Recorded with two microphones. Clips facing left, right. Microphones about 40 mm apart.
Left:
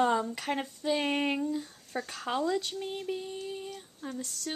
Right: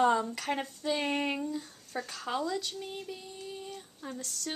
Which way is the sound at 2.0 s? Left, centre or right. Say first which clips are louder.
Left 3 dB; left.